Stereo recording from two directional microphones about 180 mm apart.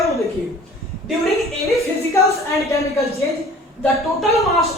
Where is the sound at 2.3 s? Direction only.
15° left (ahead or behind).